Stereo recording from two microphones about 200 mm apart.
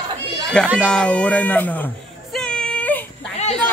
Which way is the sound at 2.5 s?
10° left (ahead or behind).